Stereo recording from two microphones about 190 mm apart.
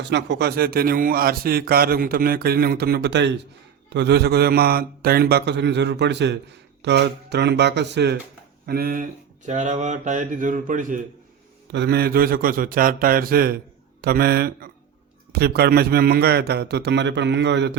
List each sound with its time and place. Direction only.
0.0 s speech: 65° right (ahead or behind)
9.5 s speech: 40° right (ahead or behind)
11.7 s speech: 60° right (ahead or behind)